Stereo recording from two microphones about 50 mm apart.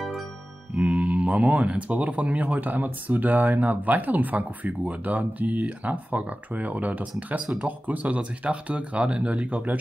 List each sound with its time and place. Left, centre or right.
0.9 s mantra: centre
1.3 s speech: right